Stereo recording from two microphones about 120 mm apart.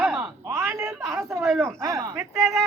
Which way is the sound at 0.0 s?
5° right (ahead or behind).